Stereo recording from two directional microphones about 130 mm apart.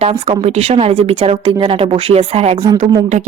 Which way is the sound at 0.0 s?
50° right (ahead or behind).